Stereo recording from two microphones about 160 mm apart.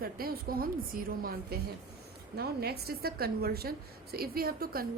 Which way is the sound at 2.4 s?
80° right.